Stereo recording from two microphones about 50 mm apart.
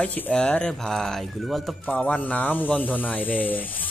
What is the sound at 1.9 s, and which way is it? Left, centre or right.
Speech, left.